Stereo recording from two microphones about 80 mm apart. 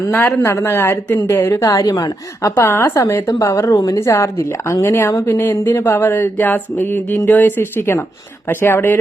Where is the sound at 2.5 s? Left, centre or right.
Left.